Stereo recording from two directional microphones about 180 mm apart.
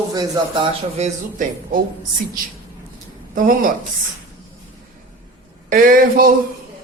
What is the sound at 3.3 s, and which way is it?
Speech, 45° right (ahead or behind).